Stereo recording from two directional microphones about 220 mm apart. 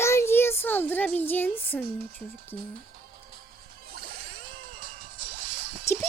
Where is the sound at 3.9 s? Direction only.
45° right (ahead or behind).